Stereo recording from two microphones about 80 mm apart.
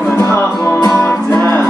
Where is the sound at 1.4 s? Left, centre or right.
Left.